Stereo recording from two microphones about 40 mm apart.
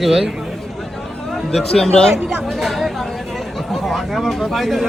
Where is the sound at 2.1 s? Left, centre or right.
Right.